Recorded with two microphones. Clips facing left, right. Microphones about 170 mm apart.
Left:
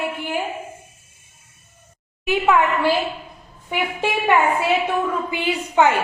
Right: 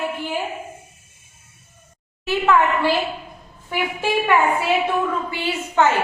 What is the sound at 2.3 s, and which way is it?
Speech, 15° left (ahead or behind).